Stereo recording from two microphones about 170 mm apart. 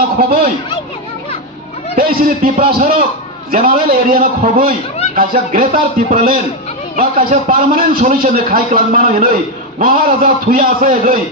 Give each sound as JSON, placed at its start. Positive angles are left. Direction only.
{"t": 2.0, "sound": "a man's voice", "side_deg": -55}